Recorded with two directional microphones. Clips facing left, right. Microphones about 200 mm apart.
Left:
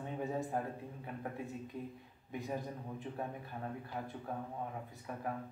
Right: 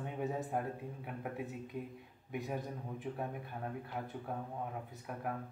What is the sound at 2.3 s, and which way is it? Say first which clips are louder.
Speech: right 1 dB; centre (ahead or behind).